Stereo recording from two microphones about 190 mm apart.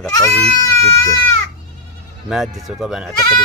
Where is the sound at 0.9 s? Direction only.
15° left (ahead or behind).